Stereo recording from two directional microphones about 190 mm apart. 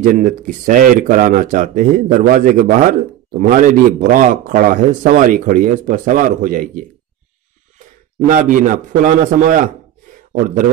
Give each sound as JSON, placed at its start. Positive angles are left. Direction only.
{"t": 0.0, "sound": "speech", "side_deg": -45}
{"t": 8.3, "sound": "speech", "side_deg": -45}